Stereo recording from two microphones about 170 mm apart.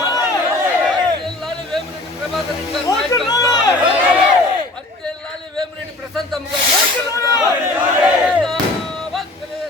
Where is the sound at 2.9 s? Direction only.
20° left (ahead or behind).